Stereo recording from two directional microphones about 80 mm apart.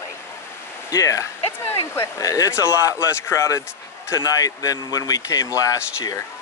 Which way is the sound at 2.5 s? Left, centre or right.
Left.